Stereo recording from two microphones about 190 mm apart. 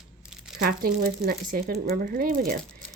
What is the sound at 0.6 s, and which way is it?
Speech, 50° right (ahead or behind).